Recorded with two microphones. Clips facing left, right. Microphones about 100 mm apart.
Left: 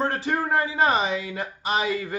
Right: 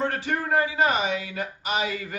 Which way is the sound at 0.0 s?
30° left (ahead or behind).